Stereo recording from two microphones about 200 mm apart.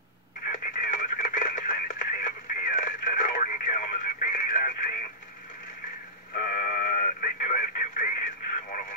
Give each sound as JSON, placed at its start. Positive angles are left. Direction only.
{"t": 0.7, "sound": "radio", "side_deg": 45}
{"t": 6.5, "sound": "radio", "side_deg": 45}